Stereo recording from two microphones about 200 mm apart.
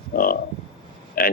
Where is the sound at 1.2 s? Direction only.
45° left (ahead or behind).